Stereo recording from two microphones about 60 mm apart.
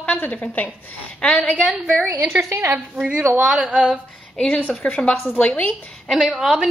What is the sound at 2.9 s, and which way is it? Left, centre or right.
A woman's voice, right.